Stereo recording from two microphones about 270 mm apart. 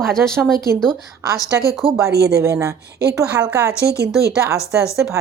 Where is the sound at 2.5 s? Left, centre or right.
Centre.